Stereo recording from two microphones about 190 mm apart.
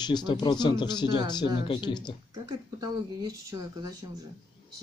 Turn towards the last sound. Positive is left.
turn(degrees=-20)  # may be behind; listen again after turning